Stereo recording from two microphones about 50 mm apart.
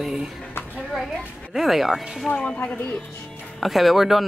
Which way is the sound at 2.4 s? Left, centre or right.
Centre.